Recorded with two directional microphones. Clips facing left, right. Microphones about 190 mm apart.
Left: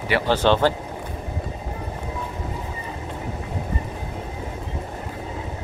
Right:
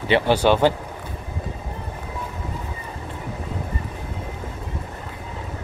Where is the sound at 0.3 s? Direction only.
10° right (ahead or behind).